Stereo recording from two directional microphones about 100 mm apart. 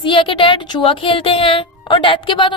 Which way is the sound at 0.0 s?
60° left (ahead or behind).